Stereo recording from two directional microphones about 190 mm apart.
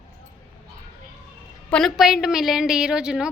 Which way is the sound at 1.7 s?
Centre (ahead or behind).